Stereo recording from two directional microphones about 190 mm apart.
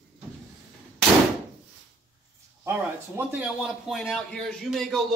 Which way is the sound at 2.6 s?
10° right (ahead or behind).